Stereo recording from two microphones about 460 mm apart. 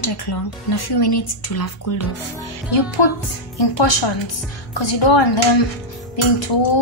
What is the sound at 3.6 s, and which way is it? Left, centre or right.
A woman's voice, left.